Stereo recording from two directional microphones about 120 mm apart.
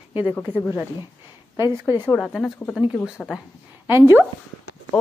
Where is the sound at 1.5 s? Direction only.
25° right (ahead or behind).